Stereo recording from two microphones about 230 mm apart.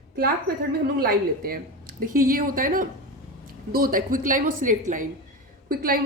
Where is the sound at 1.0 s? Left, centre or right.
Right.